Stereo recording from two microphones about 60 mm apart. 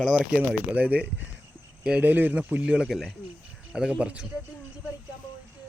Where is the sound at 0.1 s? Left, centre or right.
Centre.